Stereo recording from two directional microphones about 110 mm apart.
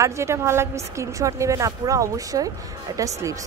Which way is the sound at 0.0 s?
25° right (ahead or behind).